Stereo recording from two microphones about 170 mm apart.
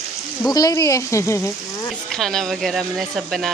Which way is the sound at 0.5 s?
20° left (ahead or behind).